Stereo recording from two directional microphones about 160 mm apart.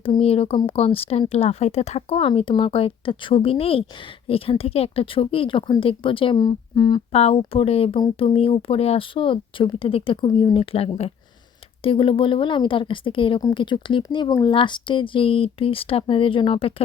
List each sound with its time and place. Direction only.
0.0 s a woman's voice: 35° left (ahead or behind)
7.1 s a woman's voice: 40° left (ahead or behind)